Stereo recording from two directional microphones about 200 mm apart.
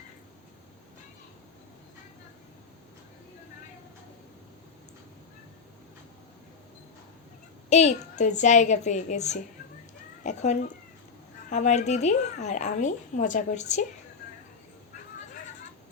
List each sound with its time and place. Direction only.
7.7 s a woman's voice: 35° left (ahead or behind)